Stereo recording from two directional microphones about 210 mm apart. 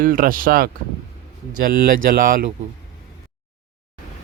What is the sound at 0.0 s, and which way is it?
Speech, 40° right (ahead or behind).